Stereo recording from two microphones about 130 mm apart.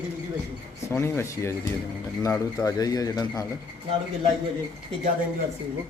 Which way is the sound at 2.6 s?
30° left (ahead or behind).